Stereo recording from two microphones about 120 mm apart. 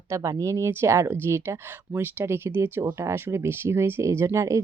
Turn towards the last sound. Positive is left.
turn(degrees=-25)  # may be behind; listen again after turning